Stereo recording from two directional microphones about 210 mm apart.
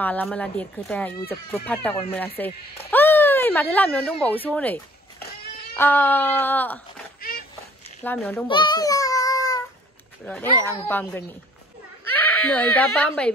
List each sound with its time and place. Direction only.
0.0 s speech: 5° left (ahead or behind)
7.2 s a sound: 45° left (ahead or behind)
8.0 s speech: 10° left (ahead or behind)
8.5 s child singing: 20° left (ahead or behind)
10.2 s speech: 10° left (ahead or behind)
12.4 s speech: 5° left (ahead or behind)